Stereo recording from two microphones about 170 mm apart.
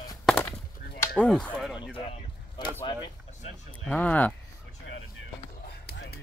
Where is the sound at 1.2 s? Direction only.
5° left (ahead or behind).